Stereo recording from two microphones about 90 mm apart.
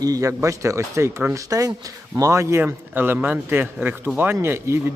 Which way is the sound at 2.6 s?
25° right (ahead or behind).